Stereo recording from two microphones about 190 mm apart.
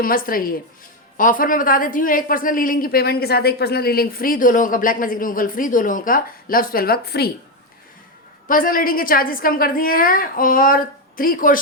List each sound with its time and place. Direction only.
0.0 s a woman's voice: 50° left (ahead or behind)
8.4 s a woman's voice: 45° left (ahead or behind)